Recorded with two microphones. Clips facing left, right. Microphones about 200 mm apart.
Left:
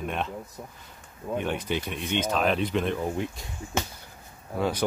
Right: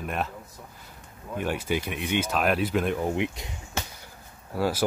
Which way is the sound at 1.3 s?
5° right (ahead or behind).